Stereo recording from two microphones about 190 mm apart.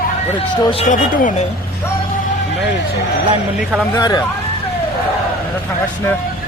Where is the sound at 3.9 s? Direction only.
20° left (ahead or behind).